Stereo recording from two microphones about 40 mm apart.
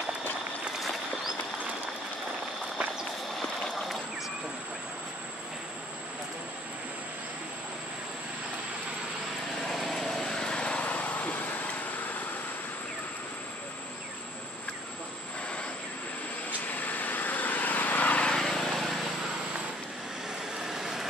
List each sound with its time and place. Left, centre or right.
3.7 s a sound: centre
9.7 s vehicle: centre; by 10.9 s left
10.9 s vehicle: left
16.4 s vehicle: left
18.3 s vehicle: centre
18.7 s a sound: centre
20.5 s vehicle: centre